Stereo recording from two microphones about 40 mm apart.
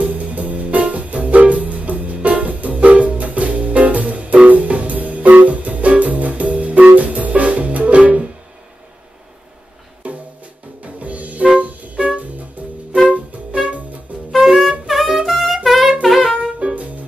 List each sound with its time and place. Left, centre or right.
0.0 s music: right
10.0 s music: right
14.1 s music: right
14.4 s saxophone: centre
15.1 s music: centre
16.5 s music: right